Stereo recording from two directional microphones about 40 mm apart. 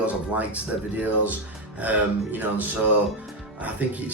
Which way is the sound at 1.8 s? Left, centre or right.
Right.